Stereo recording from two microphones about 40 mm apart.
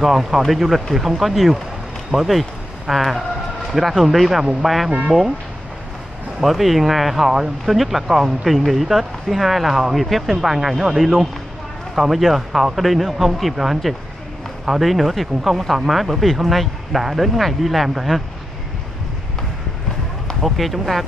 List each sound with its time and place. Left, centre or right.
0.0 s speech: centre
2.1 s speech: right
2.9 s speech: centre
6.4 s speech: centre
20.4 s speech: centre